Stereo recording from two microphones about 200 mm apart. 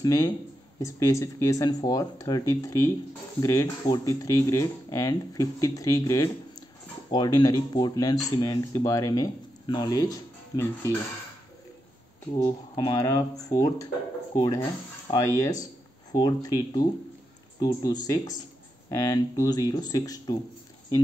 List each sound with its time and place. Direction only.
0.0 s speech: 20° left (ahead or behind)
12.4 s speech: 20° left (ahead or behind)